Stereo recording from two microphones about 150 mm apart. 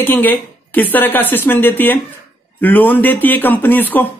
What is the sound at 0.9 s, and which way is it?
Speech, 15° left (ahead or behind).